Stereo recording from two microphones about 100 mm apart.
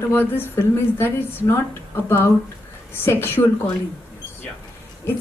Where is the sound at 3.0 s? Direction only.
20° left (ahead or behind).